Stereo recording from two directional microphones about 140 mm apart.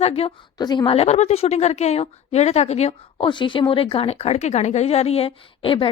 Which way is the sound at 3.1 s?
35° left (ahead or behind).